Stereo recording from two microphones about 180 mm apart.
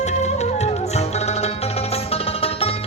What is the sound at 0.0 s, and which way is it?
Music, 40° left (ahead or behind).